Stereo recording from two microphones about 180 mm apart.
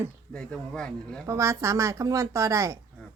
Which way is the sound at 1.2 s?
15° right (ahead or behind).